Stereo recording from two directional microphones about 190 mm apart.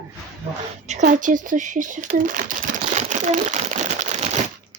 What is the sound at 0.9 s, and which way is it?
Speech, 40° right (ahead or behind).